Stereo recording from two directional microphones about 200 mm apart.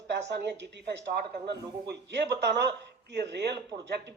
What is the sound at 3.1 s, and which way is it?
Speech, 60° right (ahead or behind).